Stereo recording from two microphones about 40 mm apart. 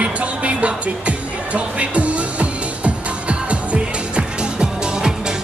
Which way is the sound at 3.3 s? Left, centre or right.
Right.